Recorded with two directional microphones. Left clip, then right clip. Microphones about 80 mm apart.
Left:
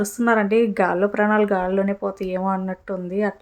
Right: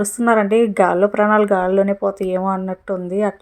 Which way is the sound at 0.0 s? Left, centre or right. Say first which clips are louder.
Right 4 dB; right.